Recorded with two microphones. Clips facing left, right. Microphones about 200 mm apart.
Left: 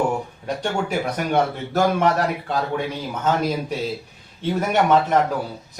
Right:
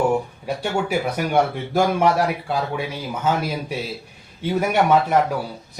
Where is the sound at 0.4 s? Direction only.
10° right (ahead or behind).